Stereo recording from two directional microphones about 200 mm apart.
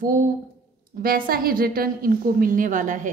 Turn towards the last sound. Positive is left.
turn(degrees=-40)  # may be behind; listen again after turning